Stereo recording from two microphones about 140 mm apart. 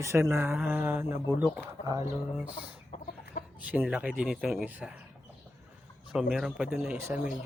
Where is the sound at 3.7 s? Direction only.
10° right (ahead or behind).